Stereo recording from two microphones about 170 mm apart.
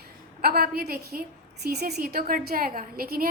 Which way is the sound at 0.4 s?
60° right (ahead or behind).